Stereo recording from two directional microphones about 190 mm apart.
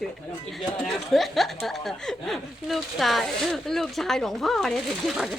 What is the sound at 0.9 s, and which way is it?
Speech, centre (ahead or behind).